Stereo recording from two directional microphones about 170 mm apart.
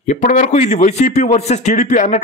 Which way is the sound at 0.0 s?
45° left (ahead or behind).